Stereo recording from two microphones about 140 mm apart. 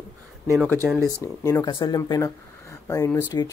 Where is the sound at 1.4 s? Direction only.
25° left (ahead or behind).